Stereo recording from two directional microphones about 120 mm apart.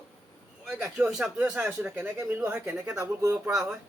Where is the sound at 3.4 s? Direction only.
5° right (ahead or behind).